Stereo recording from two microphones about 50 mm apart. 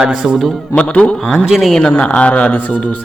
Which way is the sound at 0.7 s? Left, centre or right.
Left.